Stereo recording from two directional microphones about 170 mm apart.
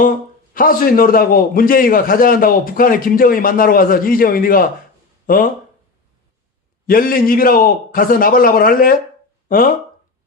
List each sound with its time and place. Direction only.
0.5 s a man's voice: 55° left (ahead or behind)
6.8 s a man's voice: 55° left (ahead or behind)